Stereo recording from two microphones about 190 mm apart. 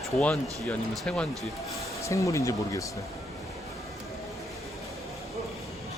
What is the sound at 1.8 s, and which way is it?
Speech, 15° left (ahead or behind).